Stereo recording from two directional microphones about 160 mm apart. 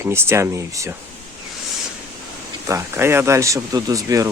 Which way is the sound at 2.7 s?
15° right (ahead or behind).